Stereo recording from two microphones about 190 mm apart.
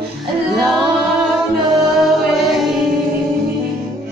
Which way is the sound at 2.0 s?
Centre (ahead or behind).